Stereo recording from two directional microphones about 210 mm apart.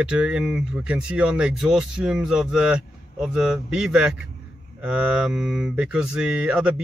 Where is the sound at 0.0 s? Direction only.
5° right (ahead or behind).